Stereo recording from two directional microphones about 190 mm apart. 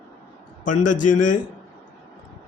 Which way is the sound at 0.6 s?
40° left (ahead or behind).